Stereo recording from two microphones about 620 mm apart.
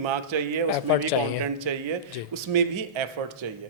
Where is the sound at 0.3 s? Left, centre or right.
Right.